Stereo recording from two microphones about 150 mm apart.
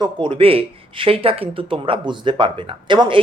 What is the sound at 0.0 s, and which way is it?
Speech, 35° right (ahead or behind).